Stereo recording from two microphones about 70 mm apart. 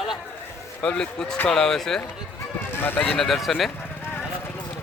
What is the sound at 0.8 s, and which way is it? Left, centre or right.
Speech, centre.